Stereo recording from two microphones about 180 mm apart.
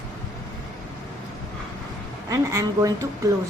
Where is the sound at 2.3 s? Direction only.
20° right (ahead or behind).